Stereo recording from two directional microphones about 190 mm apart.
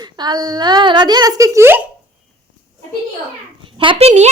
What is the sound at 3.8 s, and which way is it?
Speech, 30° right (ahead or behind).